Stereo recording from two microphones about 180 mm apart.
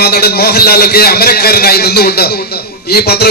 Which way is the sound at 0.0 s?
60° left (ahead or behind).